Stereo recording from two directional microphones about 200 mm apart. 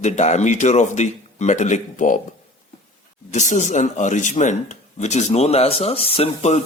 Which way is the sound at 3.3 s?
35° left (ahead or behind).